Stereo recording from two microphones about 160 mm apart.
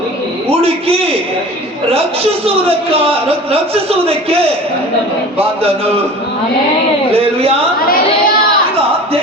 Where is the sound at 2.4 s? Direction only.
40° right (ahead or behind).